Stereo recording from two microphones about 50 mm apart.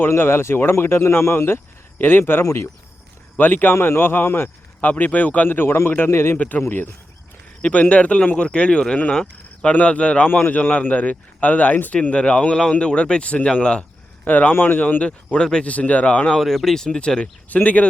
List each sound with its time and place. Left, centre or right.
0.2 s speech: left
2.0 s a man's voice: left
2.4 s speech: left
3.3 s a man's voice: left
4.8 s speech: left
5.5 s a man's voice: left
6.3 s speech: left
6.6 s a man's voice: left
7.6 s speech: left
12.1 s speech: left
14.3 s speech: left
15.0 s speech: left
16.4 s speech: centre
17.5 s speech: left